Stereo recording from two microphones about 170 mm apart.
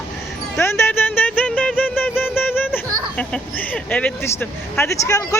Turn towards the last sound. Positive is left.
turn(degrees=20)  # may be behind; listen again after turning